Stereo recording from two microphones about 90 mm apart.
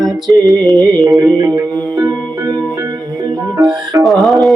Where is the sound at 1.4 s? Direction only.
40° right (ahead or behind).